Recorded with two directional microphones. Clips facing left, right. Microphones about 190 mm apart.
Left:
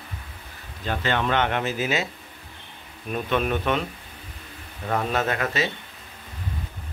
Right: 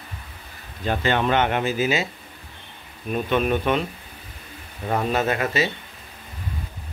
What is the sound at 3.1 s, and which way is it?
Speech, 5° right (ahead or behind).